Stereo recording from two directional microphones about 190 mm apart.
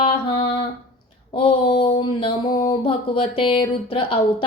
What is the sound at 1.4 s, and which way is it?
Speech, 30° left (ahead or behind).